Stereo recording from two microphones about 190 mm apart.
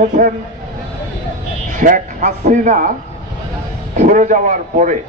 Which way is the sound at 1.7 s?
45° right (ahead or behind).